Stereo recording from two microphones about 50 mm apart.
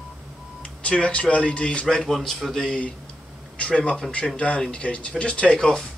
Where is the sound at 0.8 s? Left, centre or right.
Left.